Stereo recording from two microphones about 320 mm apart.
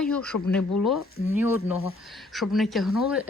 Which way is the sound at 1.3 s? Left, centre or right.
Centre.